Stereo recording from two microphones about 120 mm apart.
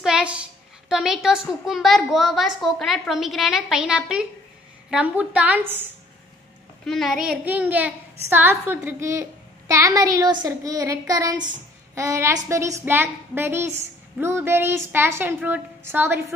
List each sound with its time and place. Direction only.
0.0 s a child's voice: 10° right (ahead or behind)
6.8 s a child's voice: centre (ahead or behind); by 16.2 s 20° right (ahead or behind)